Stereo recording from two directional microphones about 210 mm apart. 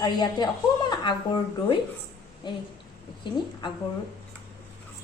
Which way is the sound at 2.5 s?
20° left (ahead or behind).